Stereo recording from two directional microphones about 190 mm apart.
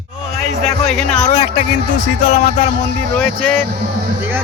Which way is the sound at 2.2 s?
40° left (ahead or behind).